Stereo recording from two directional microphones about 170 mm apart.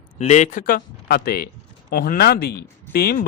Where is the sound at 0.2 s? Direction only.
45° left (ahead or behind).